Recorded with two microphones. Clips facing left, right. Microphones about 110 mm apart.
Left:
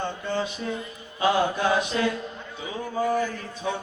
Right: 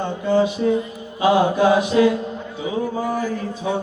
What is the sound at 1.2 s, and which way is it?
Mantra, 20° right (ahead or behind).